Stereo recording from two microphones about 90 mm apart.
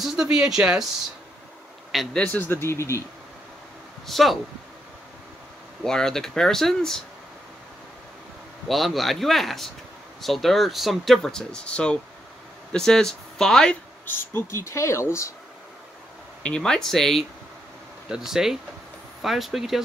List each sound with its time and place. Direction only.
0.0 s speech: 5° right (ahead or behind)
2.1 s speech: 15° left (ahead or behind)
4.1 s speech: centre (ahead or behind)
5.9 s speech: 5° left (ahead or behind)
8.6 s speech: centre (ahead or behind)
14.0 s speech: 30° left (ahead or behind)
16.4 s speech: 10° left (ahead or behind)